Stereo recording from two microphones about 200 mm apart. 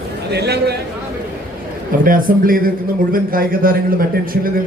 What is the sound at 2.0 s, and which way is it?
A man's voice, 45° right (ahead or behind).